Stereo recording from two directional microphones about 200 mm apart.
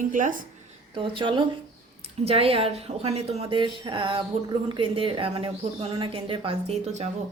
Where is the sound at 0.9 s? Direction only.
25° right (ahead or behind).